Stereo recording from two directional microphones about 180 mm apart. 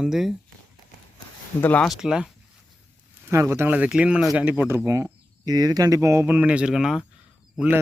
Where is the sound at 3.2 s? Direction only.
15° right (ahead or behind).